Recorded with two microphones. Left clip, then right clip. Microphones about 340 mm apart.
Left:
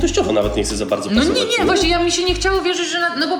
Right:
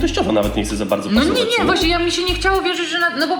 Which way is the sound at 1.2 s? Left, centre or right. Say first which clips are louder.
Even; centre.